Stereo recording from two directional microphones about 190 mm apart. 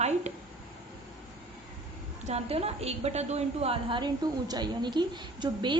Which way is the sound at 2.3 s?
35° right (ahead or behind).